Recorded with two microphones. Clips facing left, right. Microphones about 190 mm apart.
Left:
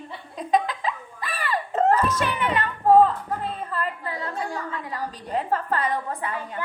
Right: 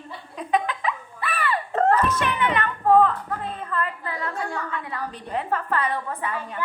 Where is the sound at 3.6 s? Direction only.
30° left (ahead or behind).